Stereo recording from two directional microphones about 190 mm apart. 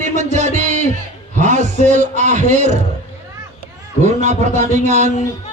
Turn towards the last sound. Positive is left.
turn(degrees=-35)  # may be behind; listen again after turning